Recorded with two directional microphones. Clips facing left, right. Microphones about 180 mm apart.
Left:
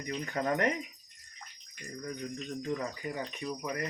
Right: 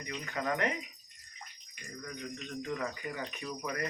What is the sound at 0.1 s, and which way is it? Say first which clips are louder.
Speech: left 3 dB; 40° left (ahead or behind).